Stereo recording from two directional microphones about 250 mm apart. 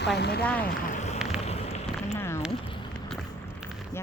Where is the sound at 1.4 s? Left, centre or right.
Left.